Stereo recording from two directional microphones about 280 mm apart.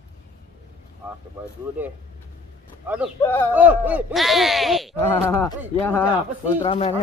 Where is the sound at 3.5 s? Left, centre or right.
Centre.